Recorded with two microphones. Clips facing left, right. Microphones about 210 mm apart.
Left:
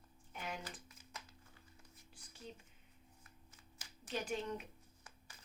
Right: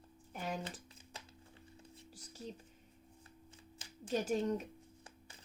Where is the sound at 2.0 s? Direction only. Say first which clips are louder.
Right 8 dB; 40° right (ahead or behind).